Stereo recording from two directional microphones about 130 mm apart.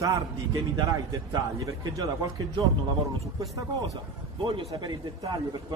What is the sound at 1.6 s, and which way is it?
Speech, 25° right (ahead or behind).